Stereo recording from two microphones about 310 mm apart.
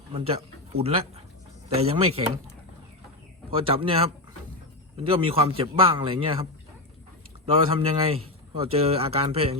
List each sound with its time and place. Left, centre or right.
0.1 s speech: centre
3.5 s a man's voice: centre